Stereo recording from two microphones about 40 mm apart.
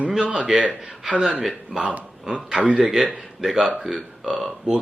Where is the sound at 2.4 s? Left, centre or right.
Right.